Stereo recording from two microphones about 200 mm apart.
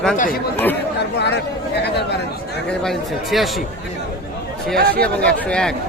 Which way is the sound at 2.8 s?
Centre (ahead or behind).